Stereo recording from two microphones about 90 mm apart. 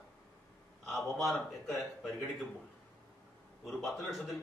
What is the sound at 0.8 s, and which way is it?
Speech, centre (ahead or behind).